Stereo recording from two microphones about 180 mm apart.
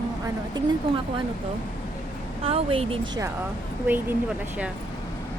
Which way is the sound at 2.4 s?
30° right (ahead or behind).